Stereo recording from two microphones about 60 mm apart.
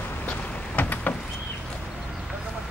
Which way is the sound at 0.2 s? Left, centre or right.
Left.